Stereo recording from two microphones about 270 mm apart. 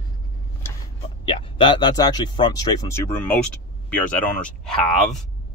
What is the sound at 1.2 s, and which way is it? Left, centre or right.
Speech, centre.